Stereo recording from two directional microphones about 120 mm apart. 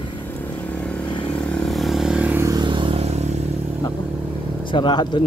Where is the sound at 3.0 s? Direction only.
65° right (ahead or behind).